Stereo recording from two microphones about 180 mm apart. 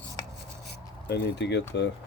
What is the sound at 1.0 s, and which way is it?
Speech, 70° left (ahead or behind).